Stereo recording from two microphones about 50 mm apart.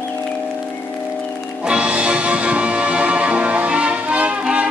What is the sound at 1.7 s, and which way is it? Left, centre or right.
Music, right.